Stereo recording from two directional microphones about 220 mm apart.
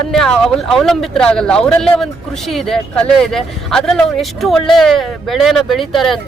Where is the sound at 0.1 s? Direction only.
Centre (ahead or behind).